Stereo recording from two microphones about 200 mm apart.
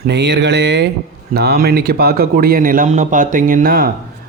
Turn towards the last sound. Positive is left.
turn(degrees=-45)  # may be behind; listen again after turning